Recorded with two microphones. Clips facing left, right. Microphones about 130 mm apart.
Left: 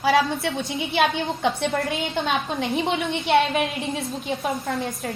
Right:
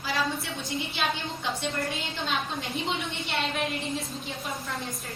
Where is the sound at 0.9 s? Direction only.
60° left (ahead or behind).